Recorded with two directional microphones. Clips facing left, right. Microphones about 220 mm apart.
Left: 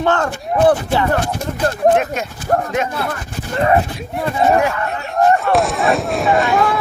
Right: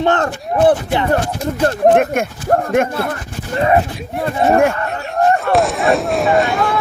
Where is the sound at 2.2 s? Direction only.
50° right (ahead or behind).